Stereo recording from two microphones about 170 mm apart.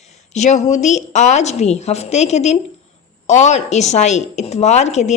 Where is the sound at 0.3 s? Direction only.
45° left (ahead or behind).